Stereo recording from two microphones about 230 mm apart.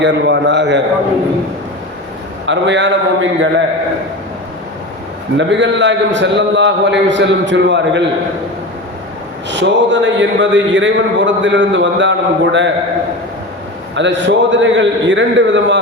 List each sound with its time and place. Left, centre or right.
0.0 s a man's voice: right
2.5 s a man's voice: right
5.4 s a man's voice: right
9.5 s a man's voice: right
13.9 s a man's voice: right